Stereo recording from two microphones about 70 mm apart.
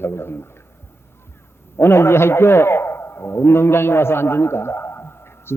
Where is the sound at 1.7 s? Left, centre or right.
Left.